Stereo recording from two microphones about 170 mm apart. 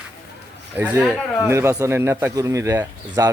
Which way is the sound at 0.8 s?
10° right (ahead or behind).